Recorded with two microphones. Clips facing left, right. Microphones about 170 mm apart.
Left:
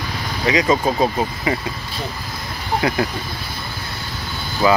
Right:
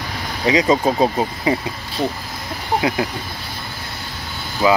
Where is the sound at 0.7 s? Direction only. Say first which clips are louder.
Right 1 dB; 20° right (ahead or behind).